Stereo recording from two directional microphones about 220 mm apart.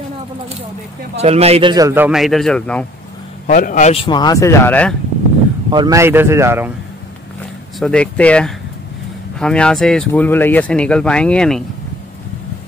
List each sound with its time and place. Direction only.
1.1 s a man's voice: 30° right (ahead or behind); by 2.9 s 5° left (ahead or behind)
3.4 s speech: 40° left (ahead or behind); by 4.9 s 5° left (ahead or behind)
5.7 s a man's voice: 15° right (ahead or behind)
7.8 s speech: 5° left (ahead or behind)